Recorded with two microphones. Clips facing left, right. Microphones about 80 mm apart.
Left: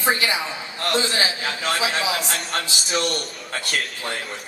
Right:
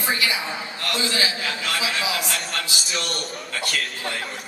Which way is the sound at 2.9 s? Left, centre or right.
Left.